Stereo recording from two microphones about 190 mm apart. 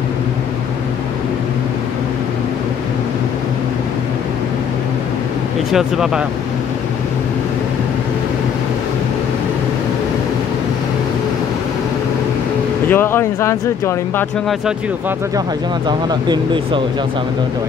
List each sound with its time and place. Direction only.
5.7 s speech: centre (ahead or behind)
12.9 s speech: 10° left (ahead or behind)
16.1 s speech: 20° right (ahead or behind)